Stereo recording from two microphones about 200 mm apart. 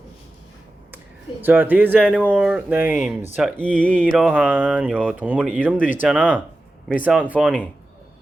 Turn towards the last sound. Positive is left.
turn(degrees=-5)  # may be behind; listen again after turning